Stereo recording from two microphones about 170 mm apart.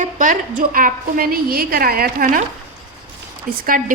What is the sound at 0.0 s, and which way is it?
A woman's voice, 50° right (ahead or behind).